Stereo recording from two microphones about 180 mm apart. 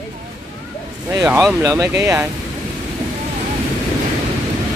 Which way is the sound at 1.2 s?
10° right (ahead or behind).